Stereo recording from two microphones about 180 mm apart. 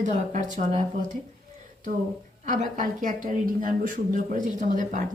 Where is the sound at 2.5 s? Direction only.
45° right (ahead or behind).